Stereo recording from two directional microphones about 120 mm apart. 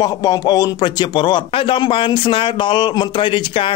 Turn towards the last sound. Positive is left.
turn(degrees=45)  # may be behind; listen again after turning